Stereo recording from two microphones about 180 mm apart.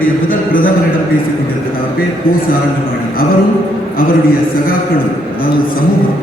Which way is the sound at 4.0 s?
55° left (ahead or behind).